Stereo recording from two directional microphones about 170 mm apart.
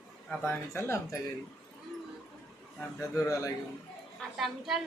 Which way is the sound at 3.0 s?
20° left (ahead or behind).